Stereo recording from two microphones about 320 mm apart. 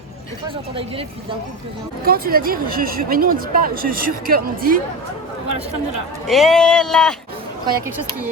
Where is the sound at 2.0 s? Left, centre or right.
Right.